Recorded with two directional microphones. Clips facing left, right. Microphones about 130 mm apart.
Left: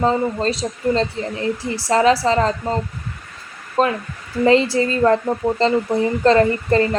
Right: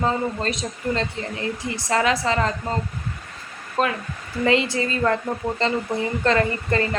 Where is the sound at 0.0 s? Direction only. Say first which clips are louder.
Left 5 dB; 30° left (ahead or behind).